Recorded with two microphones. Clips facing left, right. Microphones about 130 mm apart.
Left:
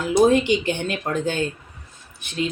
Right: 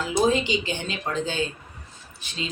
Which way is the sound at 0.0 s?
55° left (ahead or behind).